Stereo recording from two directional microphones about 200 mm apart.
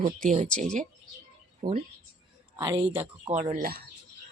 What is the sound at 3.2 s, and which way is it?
Speech, 35° right (ahead or behind).